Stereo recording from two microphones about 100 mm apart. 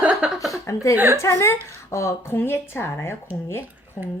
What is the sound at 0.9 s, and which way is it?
Speech, 20° right (ahead or behind).